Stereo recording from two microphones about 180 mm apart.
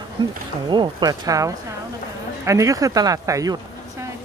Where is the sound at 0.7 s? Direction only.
25° right (ahead or behind).